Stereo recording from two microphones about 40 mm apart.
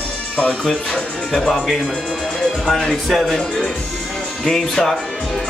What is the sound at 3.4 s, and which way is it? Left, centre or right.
Speech, centre.